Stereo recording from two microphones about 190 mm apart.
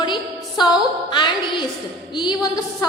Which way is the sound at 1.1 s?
25° left (ahead or behind).